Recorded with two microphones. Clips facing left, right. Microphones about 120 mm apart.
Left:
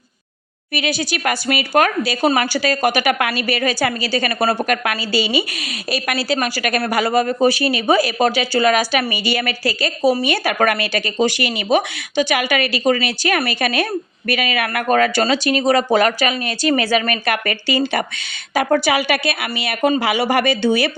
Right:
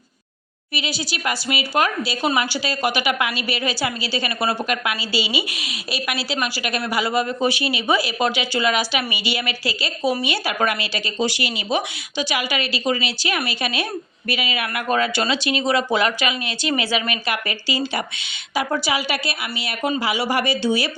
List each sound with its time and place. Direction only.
0.7 s speech: 55° left (ahead or behind)